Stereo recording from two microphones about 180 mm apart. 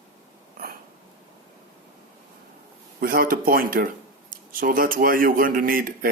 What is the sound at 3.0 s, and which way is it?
A man's voice, 55° right (ahead or behind).